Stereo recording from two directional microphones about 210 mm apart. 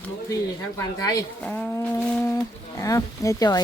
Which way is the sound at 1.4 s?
5° left (ahead or behind).